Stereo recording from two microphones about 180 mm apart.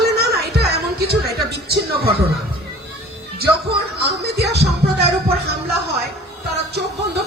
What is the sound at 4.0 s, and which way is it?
Speech, 60° right (ahead or behind).